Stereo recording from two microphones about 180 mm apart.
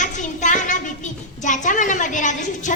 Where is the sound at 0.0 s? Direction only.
45° left (ahead or behind).